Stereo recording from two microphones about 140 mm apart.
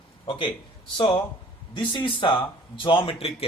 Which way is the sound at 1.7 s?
35° left (ahead or behind).